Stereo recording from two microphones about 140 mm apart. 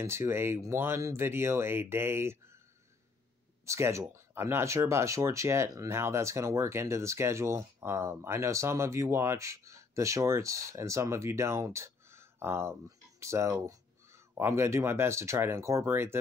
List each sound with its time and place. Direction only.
0.0 s speech: 20° right (ahead or behind)
3.6 s speech: 20° right (ahead or behind)